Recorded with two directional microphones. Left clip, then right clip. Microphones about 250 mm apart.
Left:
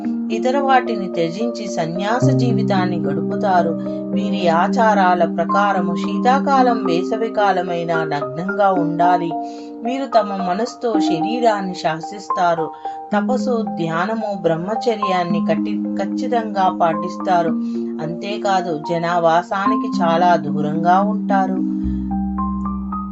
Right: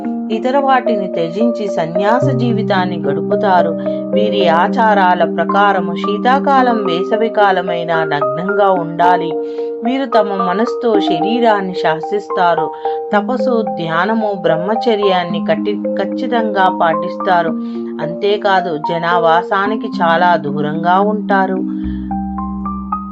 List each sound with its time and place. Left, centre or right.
0.4 s a woman's voice: centre
13.1 s a woman's voice: centre